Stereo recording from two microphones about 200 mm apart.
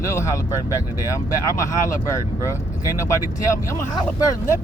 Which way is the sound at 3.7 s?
15° left (ahead or behind).